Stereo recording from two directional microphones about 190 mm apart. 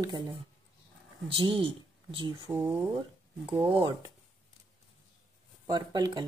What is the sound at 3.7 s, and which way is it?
Speech, 25° right (ahead or behind).